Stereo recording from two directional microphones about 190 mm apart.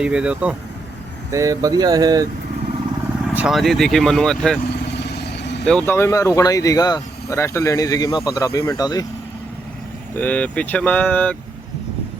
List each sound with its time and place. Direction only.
0.0 s speech: 5° right (ahead or behind)
1.3 s speech: 15° right (ahead or behind)
3.3 s speech: centre (ahead or behind)
4.8 s vehicle: 60° left (ahead or behind)
5.6 s speech: 10° left (ahead or behind)
10.2 s speech: 10° left (ahead or behind)